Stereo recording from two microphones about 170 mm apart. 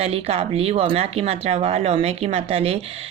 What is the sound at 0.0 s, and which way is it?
Speech, 35° right (ahead or behind).